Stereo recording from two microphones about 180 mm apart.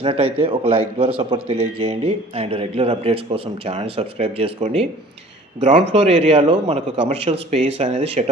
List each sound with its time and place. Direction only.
0.0 s a man's voice: 30° right (ahead or behind)